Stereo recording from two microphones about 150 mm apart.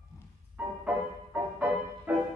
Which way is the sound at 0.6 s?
10° right (ahead or behind).